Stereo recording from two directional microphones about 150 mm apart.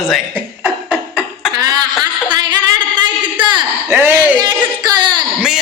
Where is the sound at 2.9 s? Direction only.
30° right (ahead or behind).